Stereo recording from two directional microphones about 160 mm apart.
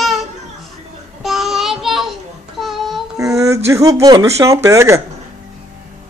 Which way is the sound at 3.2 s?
20° right (ahead or behind).